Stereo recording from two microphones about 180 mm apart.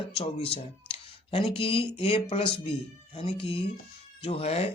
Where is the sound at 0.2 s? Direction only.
30° left (ahead or behind).